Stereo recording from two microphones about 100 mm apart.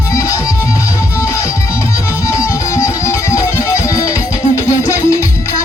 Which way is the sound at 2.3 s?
30° left (ahead or behind).